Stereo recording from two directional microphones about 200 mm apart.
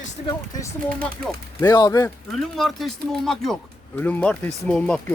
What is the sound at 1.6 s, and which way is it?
Speech, 20° left (ahead or behind).